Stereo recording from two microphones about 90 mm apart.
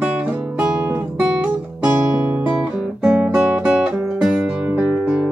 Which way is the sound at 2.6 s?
10° right (ahead or behind).